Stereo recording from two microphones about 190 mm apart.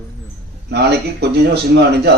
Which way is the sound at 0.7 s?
60° right (ahead or behind).